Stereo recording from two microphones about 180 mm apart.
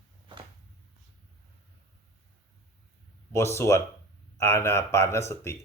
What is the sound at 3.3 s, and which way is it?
Speech, 15° left (ahead or behind).